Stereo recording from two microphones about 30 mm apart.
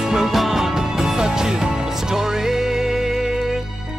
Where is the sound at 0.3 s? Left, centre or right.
Centre.